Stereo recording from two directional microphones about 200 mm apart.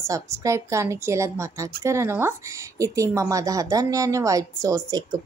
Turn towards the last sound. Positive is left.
turn(degrees=-20)  # may be behind; listen again after turning